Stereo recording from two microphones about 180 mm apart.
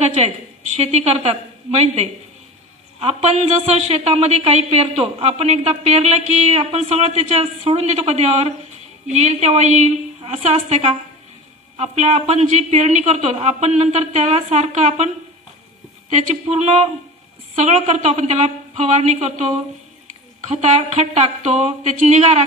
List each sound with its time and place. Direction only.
0.0 s a woman's voice: 40° right (ahead or behind)
16.1 s speech: 40° right (ahead or behind)
20.4 s speech: 40° right (ahead or behind)